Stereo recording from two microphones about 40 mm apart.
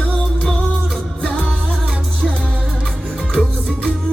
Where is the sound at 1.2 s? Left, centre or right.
Left.